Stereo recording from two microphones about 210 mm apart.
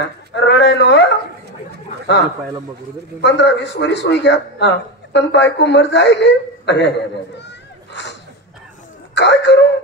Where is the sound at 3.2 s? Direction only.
55° left (ahead or behind).